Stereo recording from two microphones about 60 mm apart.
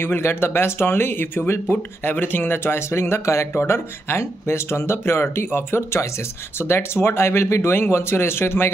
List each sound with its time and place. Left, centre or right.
0.0 s speech: left